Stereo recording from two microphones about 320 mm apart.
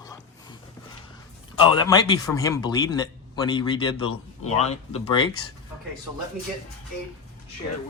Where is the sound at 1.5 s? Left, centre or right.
Centre.